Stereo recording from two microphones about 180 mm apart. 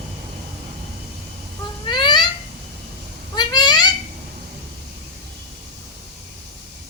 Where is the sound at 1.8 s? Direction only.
25° left (ahead or behind).